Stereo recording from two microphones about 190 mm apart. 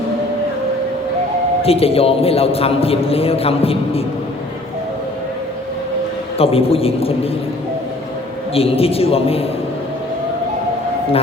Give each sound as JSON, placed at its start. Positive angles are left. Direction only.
{"t": 1.6, "sound": "a man's voice", "side_deg": 30}
{"t": 6.3, "sound": "a man's voice", "side_deg": 30}
{"t": 8.5, "sound": "a man's voice", "side_deg": 30}